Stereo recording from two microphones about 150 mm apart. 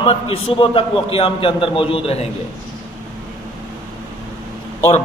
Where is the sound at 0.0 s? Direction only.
35° left (ahead or behind).